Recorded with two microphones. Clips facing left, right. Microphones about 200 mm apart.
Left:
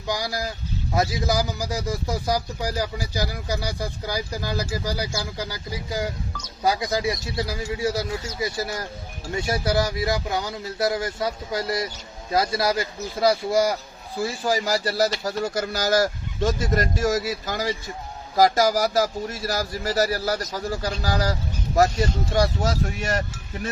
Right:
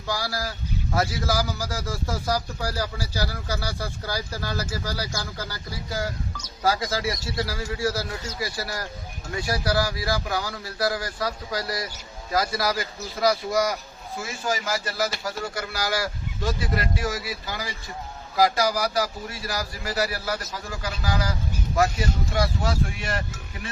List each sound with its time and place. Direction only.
0.1 s a man's voice: 20° left (ahead or behind); by 23.2 s 40° left (ahead or behind)